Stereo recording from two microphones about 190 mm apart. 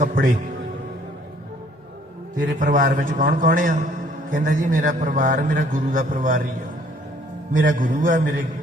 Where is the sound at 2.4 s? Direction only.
45° right (ahead or behind).